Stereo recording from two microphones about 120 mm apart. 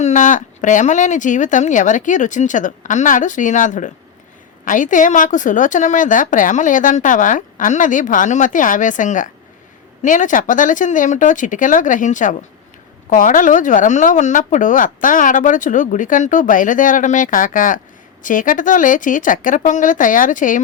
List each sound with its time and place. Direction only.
0.0 s speech: 90° left